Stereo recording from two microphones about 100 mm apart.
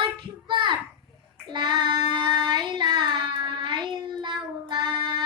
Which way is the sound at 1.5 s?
50° right (ahead or behind).